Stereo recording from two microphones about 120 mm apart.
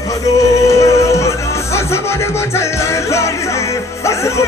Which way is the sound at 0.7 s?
25° left (ahead or behind).